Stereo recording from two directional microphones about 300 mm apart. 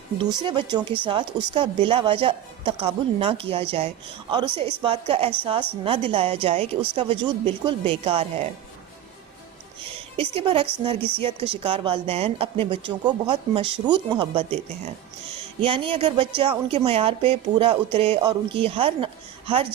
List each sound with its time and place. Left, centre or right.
0.2 s a woman's voice: centre
10.2 s a woman's voice: centre
15.6 s a woman's voice: centre